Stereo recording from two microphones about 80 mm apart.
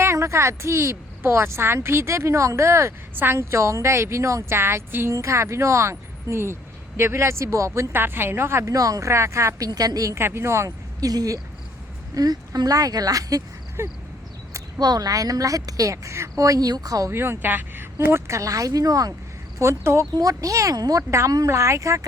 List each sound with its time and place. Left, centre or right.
0.0 s a woman's voice: right
8.7 s a woman's voice: right
9.6 s a woman's voice: right
10.2 s speech: right
11.1 s a woman's voice: right
13.8 s a woman's voice: right
14.8 s a woman's voice: right
17.1 s a woman's voice: right
19.5 s a woman's voice: right